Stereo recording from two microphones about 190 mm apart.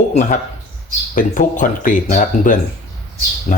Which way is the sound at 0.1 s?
40° left (ahead or behind).